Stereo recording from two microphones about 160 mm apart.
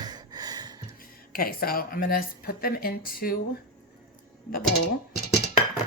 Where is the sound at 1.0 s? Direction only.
65° left (ahead or behind).